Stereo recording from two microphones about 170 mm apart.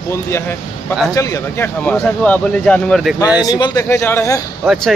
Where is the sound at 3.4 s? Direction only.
25° left (ahead or behind).